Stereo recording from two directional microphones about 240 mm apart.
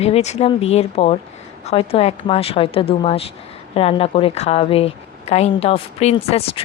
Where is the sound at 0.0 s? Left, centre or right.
Left.